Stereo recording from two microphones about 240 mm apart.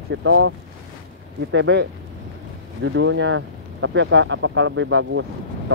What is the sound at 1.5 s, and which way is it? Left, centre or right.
Speech, right.